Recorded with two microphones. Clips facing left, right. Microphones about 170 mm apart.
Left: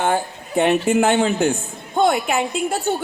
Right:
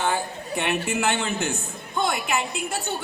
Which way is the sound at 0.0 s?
50° left (ahead or behind).